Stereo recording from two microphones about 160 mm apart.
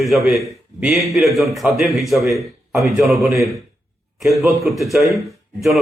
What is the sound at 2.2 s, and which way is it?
Speech, 20° right (ahead or behind).